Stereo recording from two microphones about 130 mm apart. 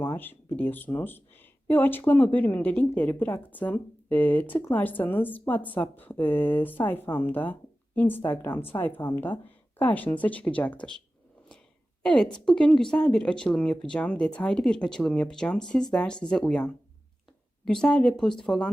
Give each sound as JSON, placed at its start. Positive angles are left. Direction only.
{"t": 0.0, "sound": "speech", "side_deg": 15}
{"t": 12.0, "sound": "speech", "side_deg": 5}